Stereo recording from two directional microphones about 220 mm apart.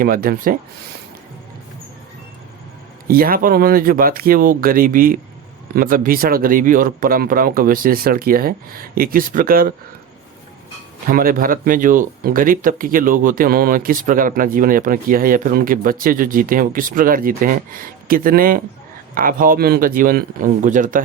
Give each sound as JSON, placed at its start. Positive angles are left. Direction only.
{"t": 0.0, "sound": "speech", "side_deg": -40}
{"t": 3.1, "sound": "speech", "side_deg": -40}
{"t": 11.1, "sound": "speech", "side_deg": -40}